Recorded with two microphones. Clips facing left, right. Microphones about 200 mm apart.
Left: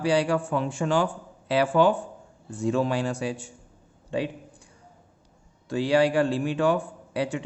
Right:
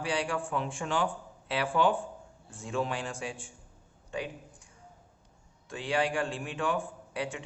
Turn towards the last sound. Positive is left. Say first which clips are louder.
# left 8 dB
turn(degrees=35)  # may be behind; listen again after turning